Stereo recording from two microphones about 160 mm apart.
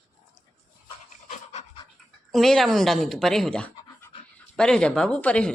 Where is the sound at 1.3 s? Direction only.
45° left (ahead or behind).